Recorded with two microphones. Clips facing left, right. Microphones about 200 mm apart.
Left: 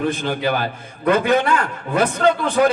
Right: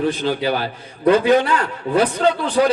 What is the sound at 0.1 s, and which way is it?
A man's voice, 50° left (ahead or behind).